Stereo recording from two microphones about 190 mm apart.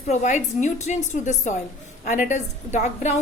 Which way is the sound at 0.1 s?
40° left (ahead or behind).